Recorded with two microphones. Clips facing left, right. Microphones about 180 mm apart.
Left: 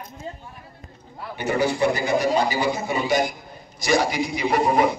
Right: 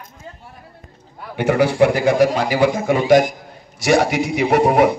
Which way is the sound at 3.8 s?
70° right (ahead or behind).